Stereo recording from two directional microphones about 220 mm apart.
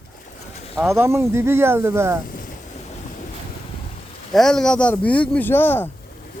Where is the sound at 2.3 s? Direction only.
40° left (ahead or behind).